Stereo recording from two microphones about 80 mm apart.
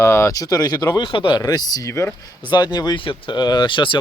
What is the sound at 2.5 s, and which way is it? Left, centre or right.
Speech, left.